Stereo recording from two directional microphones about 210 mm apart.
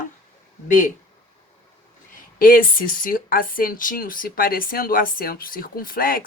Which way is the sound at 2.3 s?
40° left (ahead or behind).